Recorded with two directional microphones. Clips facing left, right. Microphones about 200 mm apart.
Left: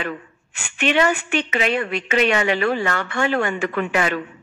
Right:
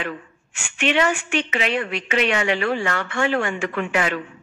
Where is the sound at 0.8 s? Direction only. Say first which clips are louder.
Left 2 dB; 40° left (ahead or behind).